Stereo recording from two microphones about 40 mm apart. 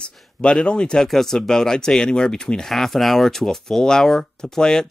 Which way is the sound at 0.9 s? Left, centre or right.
Centre.